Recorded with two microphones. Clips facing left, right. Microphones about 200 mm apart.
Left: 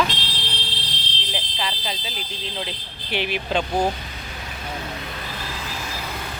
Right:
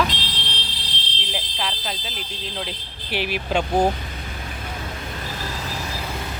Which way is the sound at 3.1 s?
5° right (ahead or behind).